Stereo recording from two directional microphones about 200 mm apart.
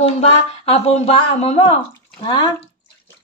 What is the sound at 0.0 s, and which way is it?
Speech, 30° left (ahead or behind).